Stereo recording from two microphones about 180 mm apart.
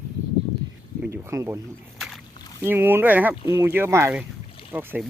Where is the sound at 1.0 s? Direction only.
10° right (ahead or behind).